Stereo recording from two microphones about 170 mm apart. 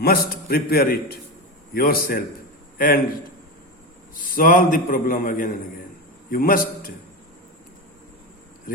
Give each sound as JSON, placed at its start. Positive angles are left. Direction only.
{"t": 0.0, "sound": "a man's voice", "side_deg": 65}
{"t": 4.1, "sound": "a man's voice", "side_deg": 55}